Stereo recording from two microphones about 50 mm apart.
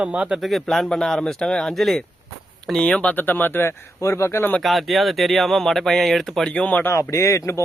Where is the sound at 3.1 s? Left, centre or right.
Left.